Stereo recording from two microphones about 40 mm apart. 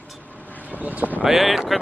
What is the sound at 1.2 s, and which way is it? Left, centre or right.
Speech, centre.